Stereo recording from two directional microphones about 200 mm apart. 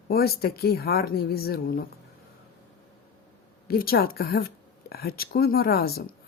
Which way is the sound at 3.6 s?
50° left (ahead or behind).